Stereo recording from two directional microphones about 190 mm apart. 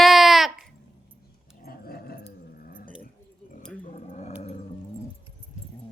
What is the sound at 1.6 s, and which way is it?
Dog, 50° left (ahead or behind).